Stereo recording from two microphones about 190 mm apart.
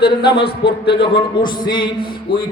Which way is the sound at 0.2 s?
25° left (ahead or behind).